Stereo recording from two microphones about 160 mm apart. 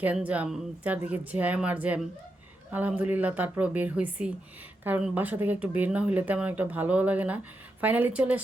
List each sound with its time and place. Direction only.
0.0 s speech: 10° right (ahead or behind)